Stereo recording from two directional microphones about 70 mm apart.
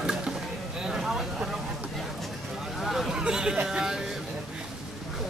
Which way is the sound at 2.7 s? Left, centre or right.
Centre.